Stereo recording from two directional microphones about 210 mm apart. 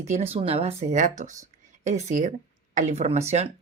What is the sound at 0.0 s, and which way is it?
Speech, 30° right (ahead or behind).